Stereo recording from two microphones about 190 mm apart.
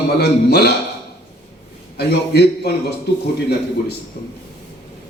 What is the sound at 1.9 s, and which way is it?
A man's voice, 60° left (ahead or behind).